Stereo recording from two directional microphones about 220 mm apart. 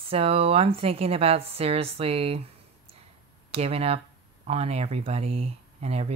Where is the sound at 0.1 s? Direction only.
25° right (ahead or behind).